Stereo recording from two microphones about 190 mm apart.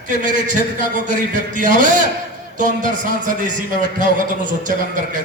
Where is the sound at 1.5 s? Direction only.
45° right (ahead or behind).